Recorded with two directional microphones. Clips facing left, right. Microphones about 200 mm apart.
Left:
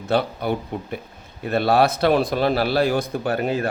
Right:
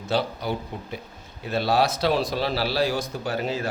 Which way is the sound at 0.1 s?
55° left (ahead or behind).